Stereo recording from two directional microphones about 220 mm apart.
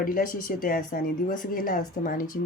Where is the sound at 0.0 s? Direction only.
40° left (ahead or behind).